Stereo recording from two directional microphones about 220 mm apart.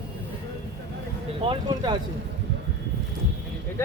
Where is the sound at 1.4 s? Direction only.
20° right (ahead or behind).